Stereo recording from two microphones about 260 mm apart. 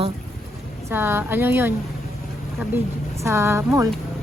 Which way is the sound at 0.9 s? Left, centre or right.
Centre.